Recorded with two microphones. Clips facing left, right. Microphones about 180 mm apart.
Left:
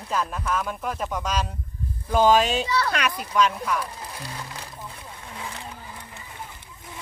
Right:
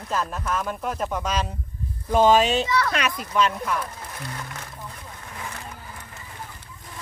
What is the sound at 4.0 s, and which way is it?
Music, 10° left (ahead or behind).